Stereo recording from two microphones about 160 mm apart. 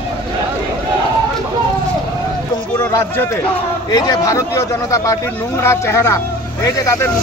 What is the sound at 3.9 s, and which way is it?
Speech, 25° left (ahead or behind).